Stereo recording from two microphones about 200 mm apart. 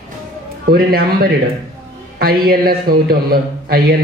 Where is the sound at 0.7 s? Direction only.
50° right (ahead or behind).